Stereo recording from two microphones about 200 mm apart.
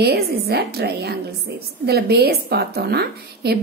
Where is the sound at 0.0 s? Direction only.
55° right (ahead or behind).